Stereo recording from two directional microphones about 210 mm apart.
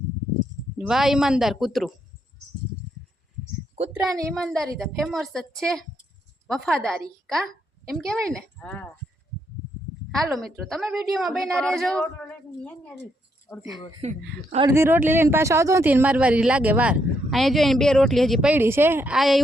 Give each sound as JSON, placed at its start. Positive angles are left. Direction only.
{"t": 0.8, "sound": "a woman's voice", "side_deg": 0}
{"t": 3.8, "sound": "a woman's voice", "side_deg": -35}
{"t": 4.4, "sound": "a woman's voice", "side_deg": 0}
{"t": 10.4, "sound": "a woman's voice", "side_deg": 0}
{"t": 14.0, "sound": "a woman's voice", "side_deg": -30}
{"t": 14.7, "sound": "speech", "side_deg": -10}